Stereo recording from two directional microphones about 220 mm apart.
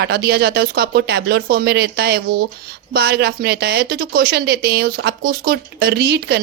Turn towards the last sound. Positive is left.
turn(degrees=-50)  # may be behind; listen again after turning